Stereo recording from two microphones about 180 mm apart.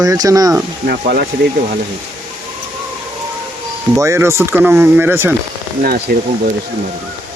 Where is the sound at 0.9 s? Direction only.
60° right (ahead or behind).